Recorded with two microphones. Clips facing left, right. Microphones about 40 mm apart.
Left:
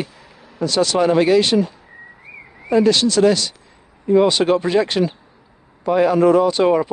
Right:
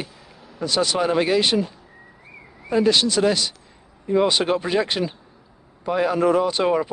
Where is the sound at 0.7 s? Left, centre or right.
Centre.